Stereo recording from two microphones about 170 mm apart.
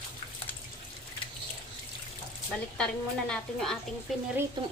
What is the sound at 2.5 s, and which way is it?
A woman's voice, 5° left (ahead or behind).